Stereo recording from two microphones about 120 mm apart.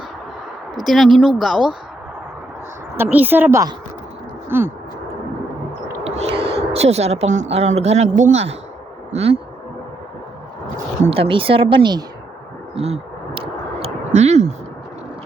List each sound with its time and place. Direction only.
0.8 s speech: centre (ahead or behind)
3.0 s a woman's voice: 15° right (ahead or behind)
4.4 s a sound: 20° right (ahead or behind)
6.1 s speech: 55° right (ahead or behind)
9.1 s speech: 55° right (ahead or behind)
11.0 s speech: 50° right (ahead or behind)
12.7 s a sound: 55° right (ahead or behind)